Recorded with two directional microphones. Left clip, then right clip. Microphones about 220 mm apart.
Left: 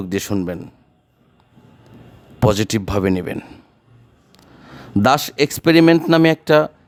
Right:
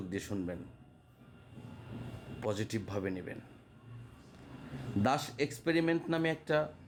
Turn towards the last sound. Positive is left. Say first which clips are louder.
# left 18 dB
turn(degrees=50)  # may be behind; listen again after turning